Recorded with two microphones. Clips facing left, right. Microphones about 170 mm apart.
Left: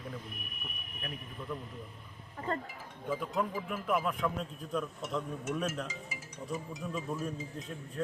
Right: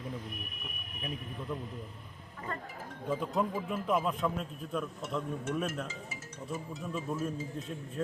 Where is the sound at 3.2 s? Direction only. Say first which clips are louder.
Right 2 dB; 25° right (ahead or behind).